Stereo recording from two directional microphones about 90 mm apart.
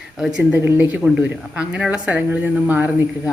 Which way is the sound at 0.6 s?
25° right (ahead or behind).